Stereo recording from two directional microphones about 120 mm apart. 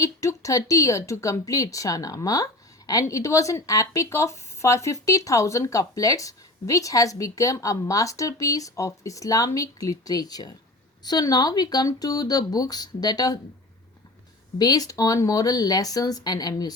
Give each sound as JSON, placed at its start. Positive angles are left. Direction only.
{"t": 0.0, "sound": "speech", "side_deg": 25}
{"t": 14.6, "sound": "speech", "side_deg": 30}